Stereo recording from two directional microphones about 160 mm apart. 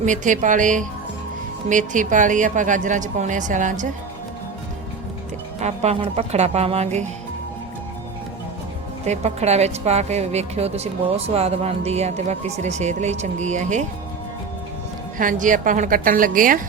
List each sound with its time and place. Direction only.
0.0 s speech: 50° right (ahead or behind)
5.5 s speech: 45° right (ahead or behind)
9.0 s speech: 45° right (ahead or behind)
15.2 s a woman's voice: 55° right (ahead or behind)